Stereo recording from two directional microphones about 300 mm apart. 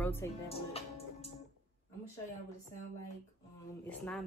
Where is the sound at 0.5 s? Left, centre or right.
Centre.